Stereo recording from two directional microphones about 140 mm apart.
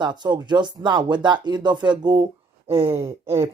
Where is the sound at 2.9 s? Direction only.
20° right (ahead or behind).